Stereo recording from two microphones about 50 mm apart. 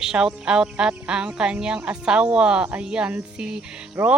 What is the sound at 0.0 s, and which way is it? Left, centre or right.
Speech, centre.